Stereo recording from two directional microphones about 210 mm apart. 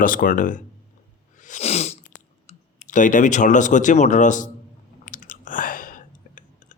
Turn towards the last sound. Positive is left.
turn(degrees=40)  # may be behind; listen again after turning